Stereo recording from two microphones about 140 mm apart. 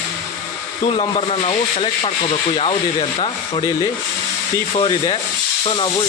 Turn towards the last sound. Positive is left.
turn(degrees=40)  # may be behind; listen again after turning